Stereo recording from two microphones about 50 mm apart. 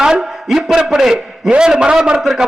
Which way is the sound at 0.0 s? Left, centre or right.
Centre.